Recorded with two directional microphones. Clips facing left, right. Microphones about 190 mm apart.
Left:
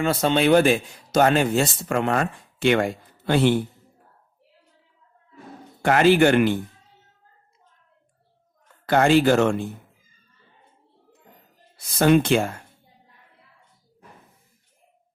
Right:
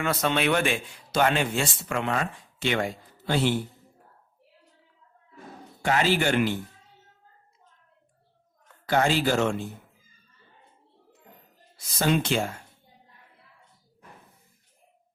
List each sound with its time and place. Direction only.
0.0 s a man's voice: 30° left (ahead or behind); by 3.6 s 55° left (ahead or behind)
5.8 s a man's voice: 55° left (ahead or behind)
8.9 s a man's voice: 55° left (ahead or behind)
11.9 s a man's voice: 55° left (ahead or behind)